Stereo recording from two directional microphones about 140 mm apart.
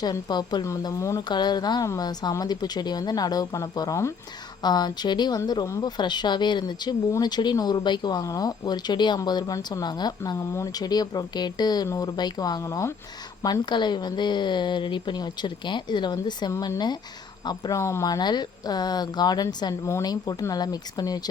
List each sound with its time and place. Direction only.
0.0 s a woman's voice: 30° left (ahead or behind)